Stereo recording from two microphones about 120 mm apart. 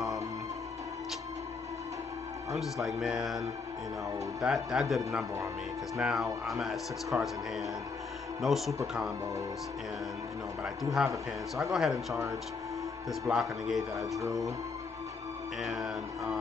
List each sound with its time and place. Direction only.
2.5 s speech: centre (ahead or behind)
10.6 s speech: 5° right (ahead or behind)
13.3 s speech: centre (ahead or behind)
14.2 s speech: 30° right (ahead or behind)
15.6 s speech: 5° right (ahead or behind)